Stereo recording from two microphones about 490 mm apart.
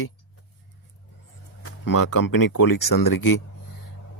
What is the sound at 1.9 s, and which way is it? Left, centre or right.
Speech, left.